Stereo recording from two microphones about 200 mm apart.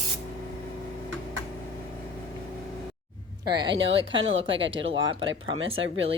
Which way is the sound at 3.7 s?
65° right (ahead or behind).